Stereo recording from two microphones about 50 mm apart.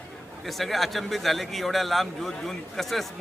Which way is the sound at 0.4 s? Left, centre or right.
Centre.